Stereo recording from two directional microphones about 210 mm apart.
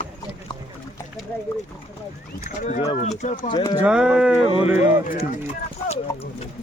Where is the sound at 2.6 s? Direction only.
35° left (ahead or behind).